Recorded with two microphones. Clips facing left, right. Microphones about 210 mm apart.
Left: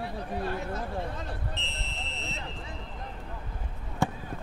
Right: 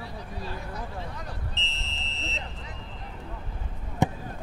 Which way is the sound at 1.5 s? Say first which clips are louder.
Left 2 dB; 55° left (ahead or behind).